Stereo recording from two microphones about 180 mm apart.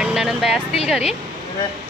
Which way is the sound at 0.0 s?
5° right (ahead or behind).